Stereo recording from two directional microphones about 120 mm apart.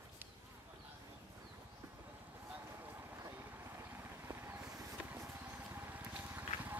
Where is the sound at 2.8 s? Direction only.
20° right (ahead or behind).